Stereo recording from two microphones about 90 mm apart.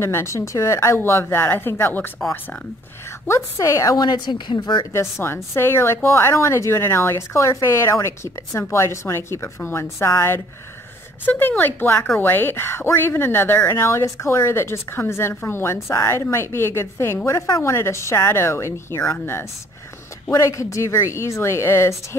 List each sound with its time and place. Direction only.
0.0 s speech: 30° left (ahead or behind)
3.3 s speech: 35° left (ahead or behind)
4.0 s speech: 55° left (ahead or behind)
5.2 s speech: 25° left (ahead or behind)